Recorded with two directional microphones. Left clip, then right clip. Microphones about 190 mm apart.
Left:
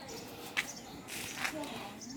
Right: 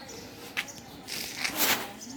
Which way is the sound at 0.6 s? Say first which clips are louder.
Right 2 dB; 20° left (ahead or behind).